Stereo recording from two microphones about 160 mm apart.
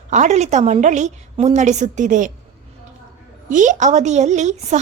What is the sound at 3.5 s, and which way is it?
A woman's voice, 50° right (ahead or behind).